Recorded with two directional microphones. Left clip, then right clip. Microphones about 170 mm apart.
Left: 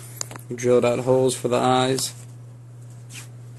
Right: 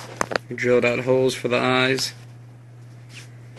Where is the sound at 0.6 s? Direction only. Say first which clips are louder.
Left 1 dB; 15° left (ahead or behind).